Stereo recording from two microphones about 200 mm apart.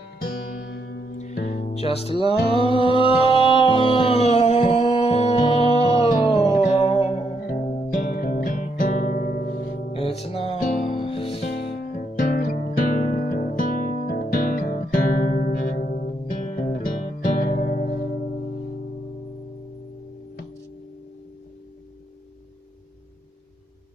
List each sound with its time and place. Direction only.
0.7 s music: 55° left (ahead or behind)
1.1 s music: 35° left (ahead or behind)
8.0 s music: 45° left (ahead or behind)
9.9 s music: 30° left (ahead or behind)
11.8 s music: 45° left (ahead or behind)